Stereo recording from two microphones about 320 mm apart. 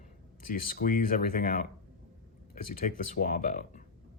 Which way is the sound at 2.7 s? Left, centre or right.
Left.